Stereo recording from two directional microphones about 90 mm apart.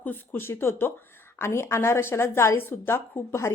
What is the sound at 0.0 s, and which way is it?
A woman's voice, 20° left (ahead or behind).